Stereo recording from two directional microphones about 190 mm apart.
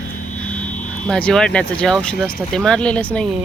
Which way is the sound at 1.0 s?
5° left (ahead or behind).